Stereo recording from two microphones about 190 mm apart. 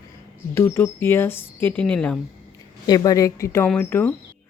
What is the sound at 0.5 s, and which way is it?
Speech, 15° left (ahead or behind).